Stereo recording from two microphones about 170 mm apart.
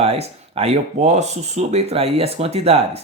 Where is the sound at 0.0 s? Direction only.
35° right (ahead or behind).